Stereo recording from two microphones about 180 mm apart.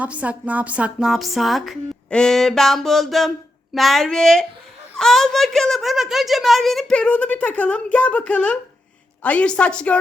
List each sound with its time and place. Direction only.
0.0 s a woman's voice: 10° right (ahead or behind)